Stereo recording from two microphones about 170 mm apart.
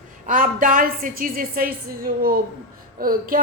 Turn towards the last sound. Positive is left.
turn(degrees=-55)  # may be behind; listen again after turning